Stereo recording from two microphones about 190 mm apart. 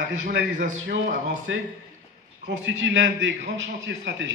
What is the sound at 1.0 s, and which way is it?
Speech, 45° right (ahead or behind).